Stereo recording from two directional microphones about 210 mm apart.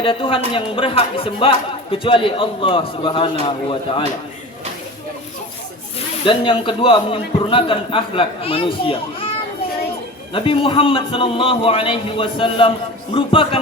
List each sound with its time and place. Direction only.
0.0 s speech: 25° left (ahead or behind)
6.2 s speech: 25° left (ahead or behind)
10.3 s speech: 25° left (ahead or behind)